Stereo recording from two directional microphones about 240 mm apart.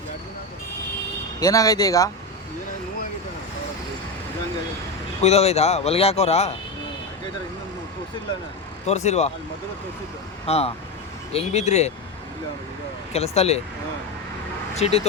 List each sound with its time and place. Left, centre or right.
1.4 s speech: centre
5.2 s speech: left
8.9 s speech: left
10.4 s speech: left
13.1 s speech: left
14.8 s speech: left